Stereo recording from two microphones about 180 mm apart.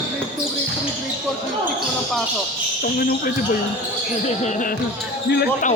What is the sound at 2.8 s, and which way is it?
Speech, 50° left (ahead or behind).